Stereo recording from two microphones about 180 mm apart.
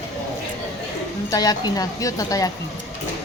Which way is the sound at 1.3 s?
20° left (ahead or behind).